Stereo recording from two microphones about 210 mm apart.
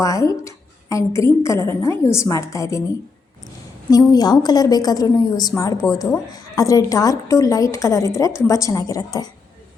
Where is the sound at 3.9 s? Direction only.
15° left (ahead or behind).